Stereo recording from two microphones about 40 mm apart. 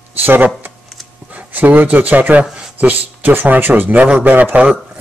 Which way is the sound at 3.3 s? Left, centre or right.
Right.